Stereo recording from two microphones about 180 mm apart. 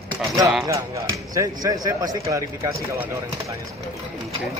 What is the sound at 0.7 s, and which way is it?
Speech, 15° right (ahead or behind).